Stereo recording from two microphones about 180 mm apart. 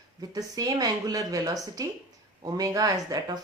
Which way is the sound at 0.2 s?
20° right (ahead or behind).